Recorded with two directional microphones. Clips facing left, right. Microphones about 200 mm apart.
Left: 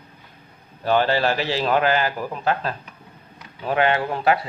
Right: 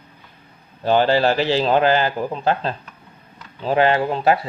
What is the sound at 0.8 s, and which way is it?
Speech, 30° right (ahead or behind).